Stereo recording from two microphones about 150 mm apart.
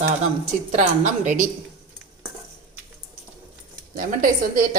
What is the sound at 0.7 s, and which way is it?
Speech, 55° right (ahead or behind).